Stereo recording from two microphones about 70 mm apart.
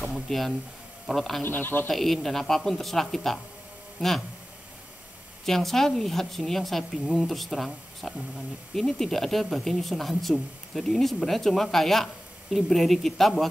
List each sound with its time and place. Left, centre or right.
0.0 s speech: centre
1.4 s speech: left
1.9 s speech: centre
5.4 s speech: centre